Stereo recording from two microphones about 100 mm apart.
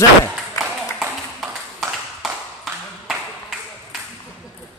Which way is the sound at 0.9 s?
Centre (ahead or behind).